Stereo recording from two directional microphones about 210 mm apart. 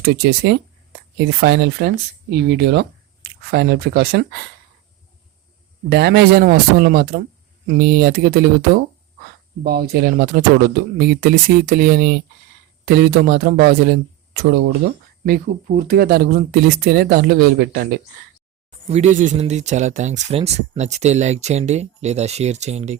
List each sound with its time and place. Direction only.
0.0 s speech: 50° right (ahead or behind)
5.9 s speech: 50° right (ahead or behind)
18.9 s speech: 30° right (ahead or behind)